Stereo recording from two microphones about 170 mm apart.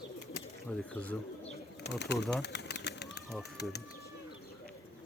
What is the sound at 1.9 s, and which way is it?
Bird, 90° left.